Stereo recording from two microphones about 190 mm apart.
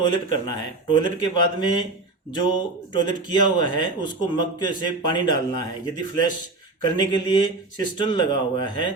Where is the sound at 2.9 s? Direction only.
25° left (ahead or behind).